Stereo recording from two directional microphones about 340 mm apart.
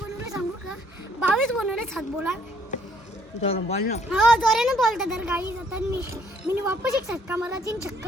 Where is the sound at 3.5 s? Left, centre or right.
Centre.